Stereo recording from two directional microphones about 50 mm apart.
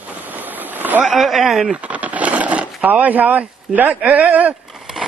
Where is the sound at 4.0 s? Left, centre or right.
Right.